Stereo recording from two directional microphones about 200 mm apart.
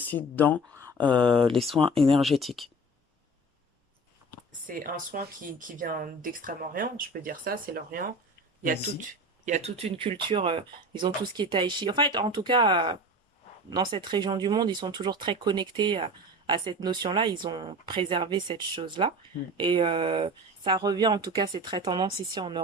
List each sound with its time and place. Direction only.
0.0 s speech: 10° left (ahead or behind)
0.8 s speech: 20° right (ahead or behind)
1.5 s speech: centre (ahead or behind)
1.8 s speech: 25° right (ahead or behind)
2.1 s speech: centre (ahead or behind)
4.6 s speech: 45° right (ahead or behind)
9.5 s speech: 30° right (ahead or behind)